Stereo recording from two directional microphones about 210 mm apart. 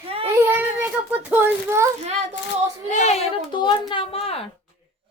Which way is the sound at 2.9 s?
35° left (ahead or behind).